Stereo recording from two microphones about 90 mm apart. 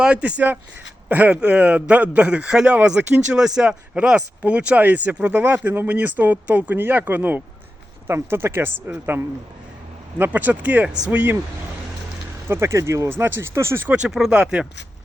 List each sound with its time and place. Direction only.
0.0 s a man's voice: 15° right (ahead or behind)
10.2 s a man's voice: 20° right (ahead or behind)
12.5 s speech: 30° right (ahead or behind)
13.9 s a man's voice: 10° right (ahead or behind)